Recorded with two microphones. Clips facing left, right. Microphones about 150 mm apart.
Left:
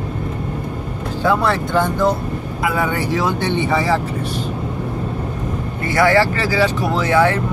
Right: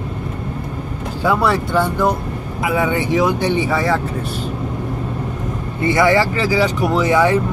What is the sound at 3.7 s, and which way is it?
Speech, centre (ahead or behind).